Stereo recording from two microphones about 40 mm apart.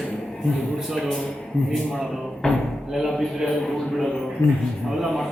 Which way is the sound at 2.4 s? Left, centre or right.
Centre.